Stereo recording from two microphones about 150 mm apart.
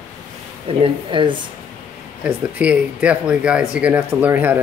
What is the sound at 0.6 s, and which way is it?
Speech, 35° right (ahead or behind).